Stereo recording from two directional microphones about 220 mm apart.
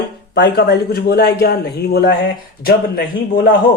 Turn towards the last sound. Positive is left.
turn(degrees=45)  # may be behind; listen again after turning